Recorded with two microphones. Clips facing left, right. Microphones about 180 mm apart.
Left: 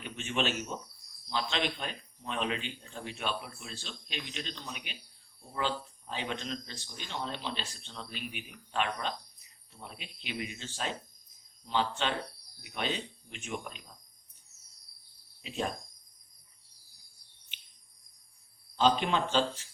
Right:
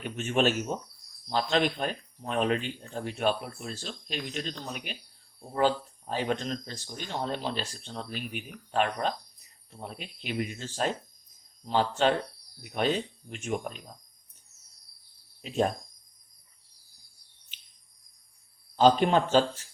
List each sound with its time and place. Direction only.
0.0 s speech: 45° right (ahead or behind)
15.4 s speech: 45° right (ahead or behind)
18.8 s speech: 45° right (ahead or behind)